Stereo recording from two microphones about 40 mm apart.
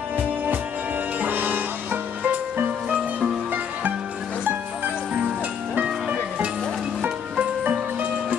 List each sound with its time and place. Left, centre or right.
1.2 s music: right
2.9 s music: right
6.0 s music: right